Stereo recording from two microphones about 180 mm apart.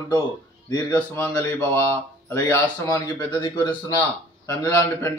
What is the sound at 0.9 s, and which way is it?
A man's voice, 10° left (ahead or behind).